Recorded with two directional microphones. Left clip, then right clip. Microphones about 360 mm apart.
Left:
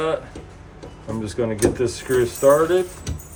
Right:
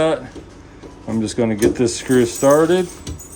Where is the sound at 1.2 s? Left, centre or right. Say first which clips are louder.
Right 3 dB; centre.